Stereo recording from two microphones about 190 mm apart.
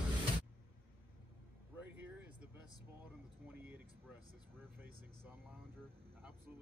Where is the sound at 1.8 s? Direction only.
10° right (ahead or behind).